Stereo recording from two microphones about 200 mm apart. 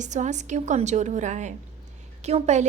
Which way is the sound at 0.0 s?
35° right (ahead or behind).